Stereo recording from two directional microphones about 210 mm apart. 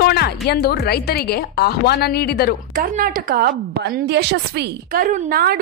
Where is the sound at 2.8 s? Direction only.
40° right (ahead or behind).